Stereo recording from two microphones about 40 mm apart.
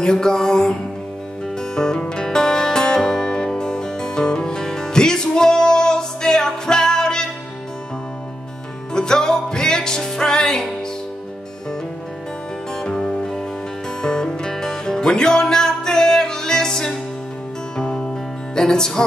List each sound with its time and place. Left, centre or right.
0.0 s music: centre
8.9 s music: centre
12.7 s music: centre